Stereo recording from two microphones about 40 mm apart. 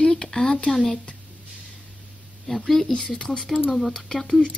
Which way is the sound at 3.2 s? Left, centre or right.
Centre.